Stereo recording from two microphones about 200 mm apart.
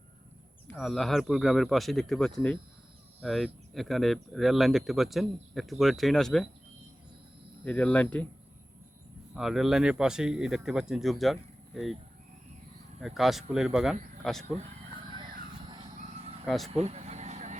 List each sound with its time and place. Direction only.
0.7 s speech: centre (ahead or behind)
7.6 s speech: 5° left (ahead or behind)
9.3 s speech: centre (ahead or behind)
13.0 s speech: centre (ahead or behind)
15.7 s vehicle: 25° right (ahead or behind)